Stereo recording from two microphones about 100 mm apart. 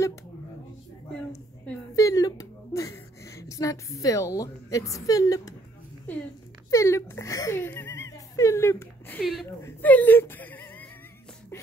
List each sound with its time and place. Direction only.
2.0 s a woman's voice: 35° left (ahead or behind)
6.7 s speech: 30° left (ahead or behind)
9.2 s speech: centre (ahead or behind)
9.6 s speech: 20° left (ahead or behind)